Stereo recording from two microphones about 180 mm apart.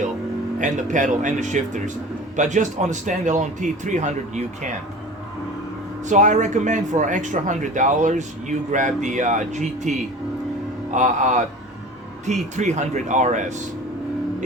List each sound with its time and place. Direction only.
0.6 s speech: 45° right (ahead or behind)
6.1 s speech: 45° right (ahead or behind)
10.9 s speech: 45° right (ahead or behind)